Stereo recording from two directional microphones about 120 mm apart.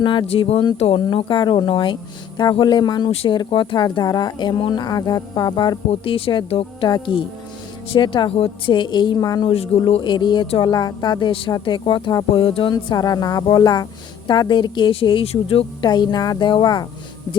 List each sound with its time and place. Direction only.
0.0 s speech: 40° left (ahead or behind)
0.3 s speech: 55° left (ahead or behind)
3.8 s speech: 30° left (ahead or behind)
5.9 s speech: 50° left (ahead or behind); by 9.5 s 35° left (ahead or behind)
9.5 s speech: 55° left (ahead or behind)
12.7 s speech: 30° left (ahead or behind); by 15.6 s 55° left (ahead or behind)
15.8 s speech: 35° left (ahead or behind)